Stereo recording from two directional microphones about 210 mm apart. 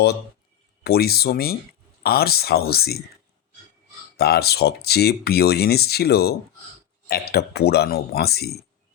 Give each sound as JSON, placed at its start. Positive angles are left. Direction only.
{"t": 0.9, "sound": "speech", "side_deg": 45}
{"t": 4.2, "sound": "speech", "side_deg": 50}